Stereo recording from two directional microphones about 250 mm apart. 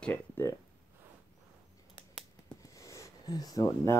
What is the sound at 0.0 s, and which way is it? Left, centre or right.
Speech, centre.